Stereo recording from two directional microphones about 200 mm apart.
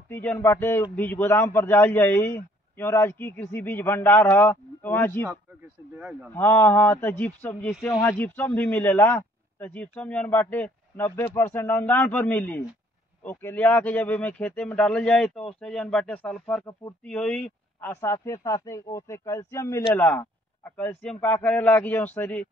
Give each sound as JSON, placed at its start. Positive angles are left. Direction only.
{"t": 0.1, "sound": "speech", "side_deg": 10}
{"t": 6.3, "sound": "speech", "side_deg": 10}